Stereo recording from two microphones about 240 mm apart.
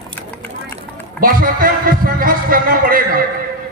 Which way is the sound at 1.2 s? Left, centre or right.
Right.